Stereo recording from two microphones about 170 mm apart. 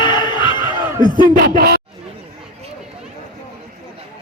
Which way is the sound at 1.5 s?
65° right (ahead or behind).